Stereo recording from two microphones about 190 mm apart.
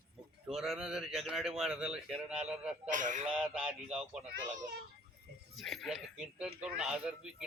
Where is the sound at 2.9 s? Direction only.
40° right (ahead or behind).